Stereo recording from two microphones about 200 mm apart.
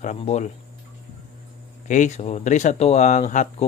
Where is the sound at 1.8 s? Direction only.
40° left (ahead or behind).